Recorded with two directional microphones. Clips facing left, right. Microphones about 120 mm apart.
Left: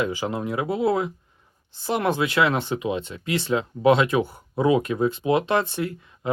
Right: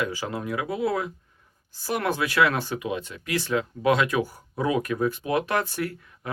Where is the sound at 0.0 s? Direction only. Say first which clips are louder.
Left 3 dB; 20° left (ahead or behind).